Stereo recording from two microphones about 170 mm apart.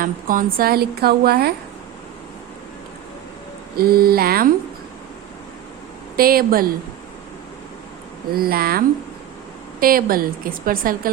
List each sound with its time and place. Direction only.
0.0 s a woman's voice: 55° right (ahead or behind)
3.8 s a woman's voice: 65° right (ahead or behind)
6.1 s a woman's voice: 60° right (ahead or behind)
8.3 s a woman's voice: 60° right (ahead or behind)
9.8 s a woman's voice: 60° right (ahead or behind)